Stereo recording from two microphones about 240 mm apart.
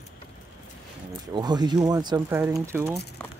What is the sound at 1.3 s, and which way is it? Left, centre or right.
Speech, centre.